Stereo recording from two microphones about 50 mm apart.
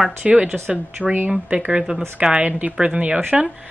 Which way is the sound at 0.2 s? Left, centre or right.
Right.